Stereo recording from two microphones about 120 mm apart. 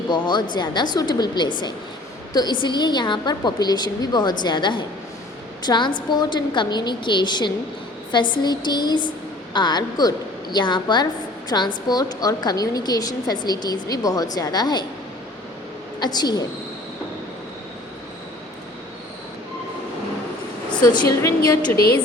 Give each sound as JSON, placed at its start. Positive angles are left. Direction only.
{"t": 0.1, "sound": "a woman's voice", "side_deg": 35}
{"t": 16.0, "sound": "a woman's voice", "side_deg": 35}
{"t": 20.7, "sound": "a woman's voice", "side_deg": 40}